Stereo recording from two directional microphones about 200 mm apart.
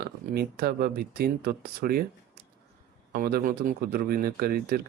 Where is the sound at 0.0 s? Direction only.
50° right (ahead or behind).